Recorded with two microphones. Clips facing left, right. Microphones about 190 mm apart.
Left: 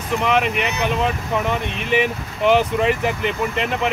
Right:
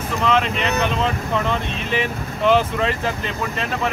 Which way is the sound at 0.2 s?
15° left (ahead or behind).